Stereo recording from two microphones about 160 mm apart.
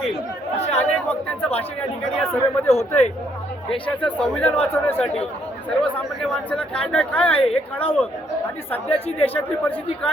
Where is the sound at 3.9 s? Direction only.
10° left (ahead or behind).